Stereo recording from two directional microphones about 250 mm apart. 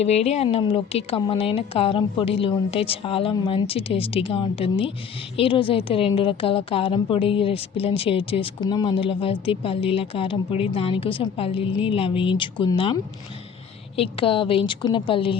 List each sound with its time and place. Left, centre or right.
0.0 s a woman's voice: left